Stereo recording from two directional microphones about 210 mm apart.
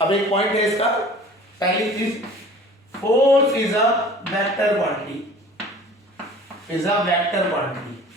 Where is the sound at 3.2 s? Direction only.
15° left (ahead or behind).